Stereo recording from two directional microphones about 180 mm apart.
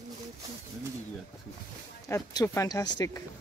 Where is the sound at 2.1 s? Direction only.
20° left (ahead or behind).